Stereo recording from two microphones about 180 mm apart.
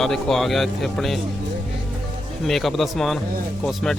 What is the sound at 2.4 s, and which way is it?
Speech, centre (ahead or behind).